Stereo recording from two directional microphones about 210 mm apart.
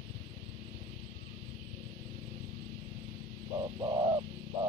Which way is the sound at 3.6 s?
20° right (ahead or behind).